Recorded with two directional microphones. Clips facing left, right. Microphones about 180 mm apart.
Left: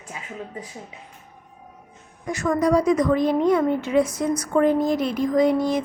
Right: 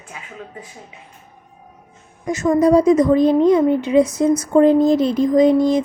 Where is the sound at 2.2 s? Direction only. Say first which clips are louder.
Right 6 dB; 20° right (ahead or behind).